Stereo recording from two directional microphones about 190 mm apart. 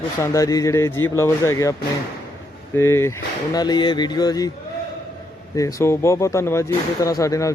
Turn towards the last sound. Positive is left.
turn(degrees=15)  # may be behind; listen again after turning